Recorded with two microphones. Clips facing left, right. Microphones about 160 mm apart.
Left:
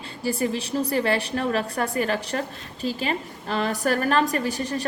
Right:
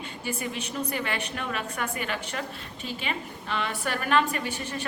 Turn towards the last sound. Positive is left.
turn(degrees=35)  # may be behind; listen again after turning